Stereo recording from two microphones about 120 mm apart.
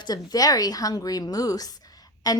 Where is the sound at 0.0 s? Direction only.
35° left (ahead or behind).